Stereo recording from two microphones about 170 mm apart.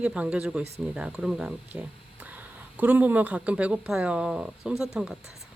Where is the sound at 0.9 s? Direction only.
5° right (ahead or behind).